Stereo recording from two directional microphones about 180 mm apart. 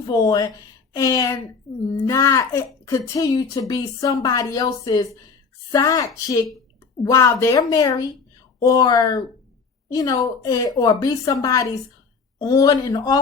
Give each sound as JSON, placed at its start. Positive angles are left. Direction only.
{"t": 0.1, "sound": "a woman's voice", "side_deg": 20}